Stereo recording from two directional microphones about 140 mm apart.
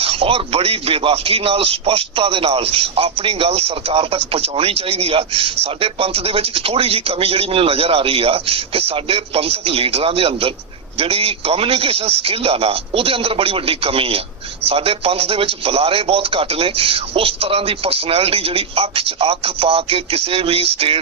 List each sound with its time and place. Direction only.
0.0 s a man's voice: 45° right (ahead or behind)